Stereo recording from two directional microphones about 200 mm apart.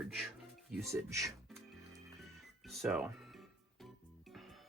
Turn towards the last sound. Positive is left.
turn(degrees=-5)  # may be behind; listen again after turning